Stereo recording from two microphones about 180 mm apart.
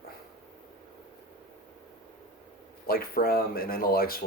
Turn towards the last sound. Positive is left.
turn(degrees=55)  # may be behind; listen again after turning